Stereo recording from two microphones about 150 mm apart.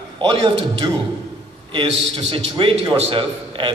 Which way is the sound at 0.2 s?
35° right (ahead or behind).